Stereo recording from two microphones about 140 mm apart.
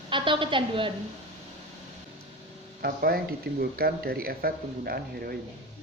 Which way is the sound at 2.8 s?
90° right.